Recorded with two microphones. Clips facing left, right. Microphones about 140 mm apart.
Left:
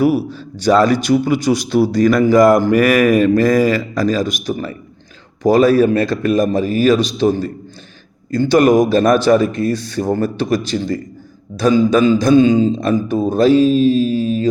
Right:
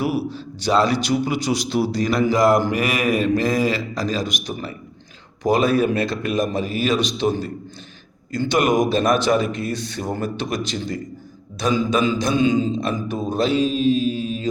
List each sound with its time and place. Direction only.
0.0 s a man's voice: 45° left (ahead or behind)